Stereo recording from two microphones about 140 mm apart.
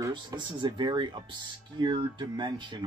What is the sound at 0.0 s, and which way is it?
Speech, 30° right (ahead or behind).